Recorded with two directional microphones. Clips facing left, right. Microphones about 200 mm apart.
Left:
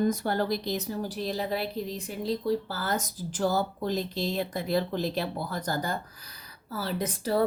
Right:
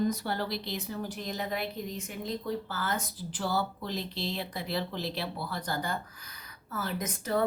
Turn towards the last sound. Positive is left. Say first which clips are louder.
# left 3 dB
turn(degrees=35)  # may be behind; listen again after turning